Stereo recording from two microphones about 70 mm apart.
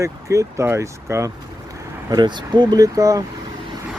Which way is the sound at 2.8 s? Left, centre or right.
Right.